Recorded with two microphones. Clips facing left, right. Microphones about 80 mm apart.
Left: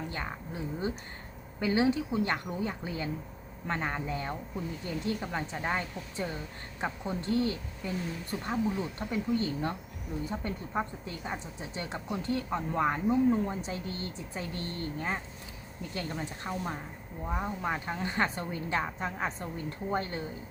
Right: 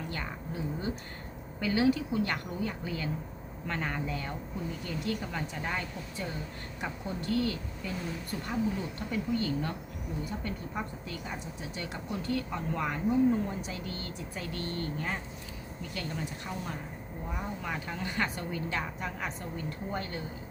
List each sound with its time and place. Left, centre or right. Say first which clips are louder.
0.1 s speech: even; left